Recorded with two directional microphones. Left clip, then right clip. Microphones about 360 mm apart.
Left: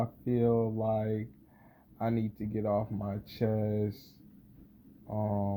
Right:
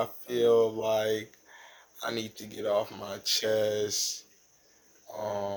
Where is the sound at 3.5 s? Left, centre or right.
Centre.